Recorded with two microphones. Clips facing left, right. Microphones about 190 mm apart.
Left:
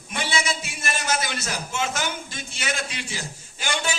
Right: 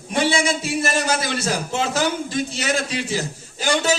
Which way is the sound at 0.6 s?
35° right (ahead or behind).